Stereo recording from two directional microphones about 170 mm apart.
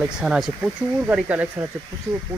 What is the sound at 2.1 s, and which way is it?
Speech, 30° right (ahead or behind).